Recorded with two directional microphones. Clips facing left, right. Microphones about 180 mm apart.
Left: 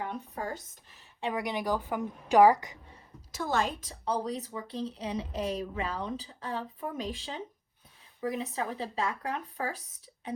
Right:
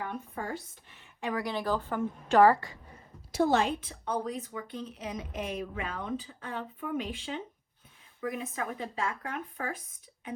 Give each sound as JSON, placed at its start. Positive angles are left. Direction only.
{"t": 0.3, "sound": "speech", "side_deg": 45}
{"t": 1.3, "sound": "a woman's voice", "side_deg": 20}
{"t": 3.5, "sound": "speech", "side_deg": 40}